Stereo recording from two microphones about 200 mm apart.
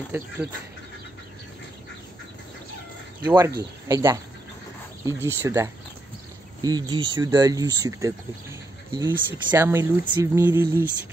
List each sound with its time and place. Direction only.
0.1 s speech: 10° right (ahead or behind)
3.3 s speech: 15° right (ahead or behind)